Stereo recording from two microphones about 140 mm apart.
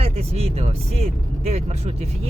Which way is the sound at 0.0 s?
45° right (ahead or behind).